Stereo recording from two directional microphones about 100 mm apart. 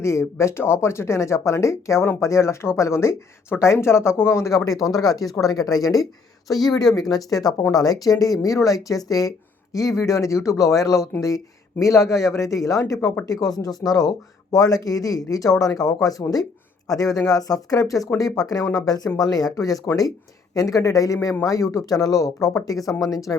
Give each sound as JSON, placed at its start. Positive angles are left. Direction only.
{"t": 0.0, "sound": "speech", "side_deg": 30}